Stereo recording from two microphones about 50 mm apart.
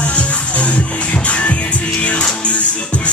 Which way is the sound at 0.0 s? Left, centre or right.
Left.